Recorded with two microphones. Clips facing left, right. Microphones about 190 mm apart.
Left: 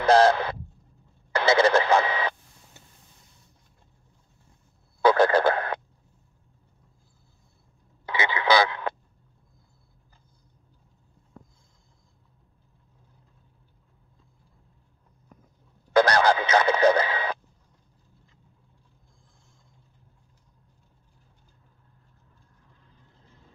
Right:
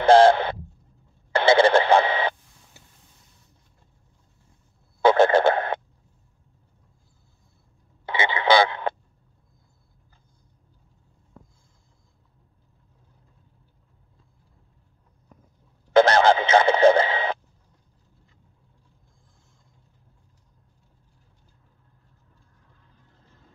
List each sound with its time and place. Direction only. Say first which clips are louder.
0.0 s a sound: right 4 dB; 30° right (ahead or behind)
1.3 s radio: right 3 dB; 30° right (ahead or behind)
5.0 s frog: right 2 dB; 25° right (ahead or behind)
8.0 s radio: right 2 dB; 25° right (ahead or behind)
15.9 s radio: right 4 dB; 25° right (ahead or behind)